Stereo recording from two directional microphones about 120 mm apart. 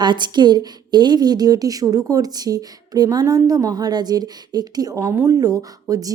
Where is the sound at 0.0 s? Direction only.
40° right (ahead or behind).